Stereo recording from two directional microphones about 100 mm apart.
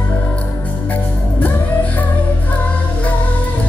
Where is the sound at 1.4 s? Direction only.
15° left (ahead or behind).